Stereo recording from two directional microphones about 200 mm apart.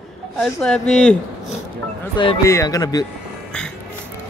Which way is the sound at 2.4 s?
15° left (ahead or behind).